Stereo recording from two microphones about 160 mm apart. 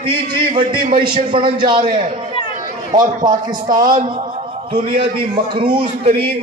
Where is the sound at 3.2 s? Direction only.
25° right (ahead or behind).